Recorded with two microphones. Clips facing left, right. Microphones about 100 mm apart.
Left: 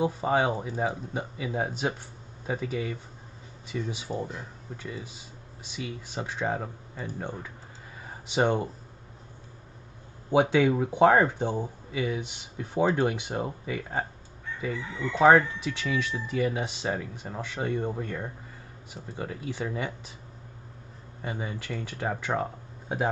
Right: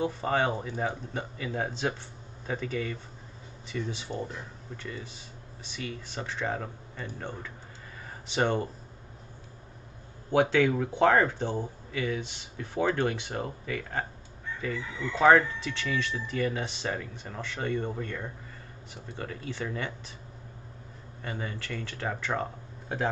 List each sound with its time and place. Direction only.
0.0 s speech: 10° left (ahead or behind)
10.3 s speech: 15° left (ahead or behind)
21.2 s speech: 15° left (ahead or behind)